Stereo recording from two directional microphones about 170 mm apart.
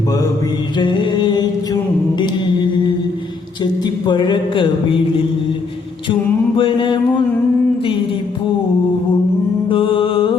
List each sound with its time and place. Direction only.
0.8 s mantra: 25° left (ahead or behind)
3.6 s a sound: 25° left (ahead or behind)
6.6 s mantra: 30° left (ahead or behind)
9.6 s music: 30° left (ahead or behind)